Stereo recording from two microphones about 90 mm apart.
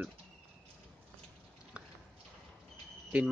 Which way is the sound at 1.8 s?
10° right (ahead or behind).